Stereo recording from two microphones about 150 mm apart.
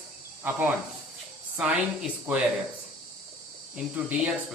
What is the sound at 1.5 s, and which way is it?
Speech, 5° right (ahead or behind).